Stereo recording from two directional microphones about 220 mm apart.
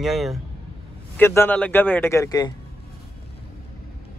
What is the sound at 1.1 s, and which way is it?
A man's voice, 10° left (ahead or behind).